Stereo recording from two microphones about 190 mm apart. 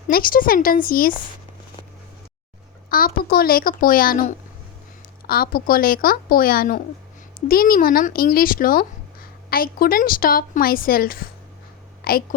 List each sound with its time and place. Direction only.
0.1 s a woman's voice: 50° left (ahead or behind)
2.9 s a woman's voice: 50° left (ahead or behind)
12.0 s a sound: 50° left (ahead or behind)